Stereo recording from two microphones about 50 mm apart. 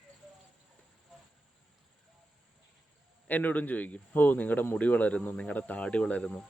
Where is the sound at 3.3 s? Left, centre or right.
Left.